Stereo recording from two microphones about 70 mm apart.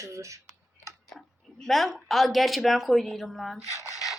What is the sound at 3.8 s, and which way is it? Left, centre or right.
Filing, left.